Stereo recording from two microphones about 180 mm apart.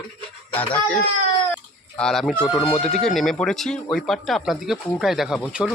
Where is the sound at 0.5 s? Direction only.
10° left (ahead or behind).